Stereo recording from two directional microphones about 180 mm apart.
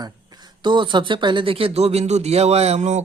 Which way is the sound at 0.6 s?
25° right (ahead or behind).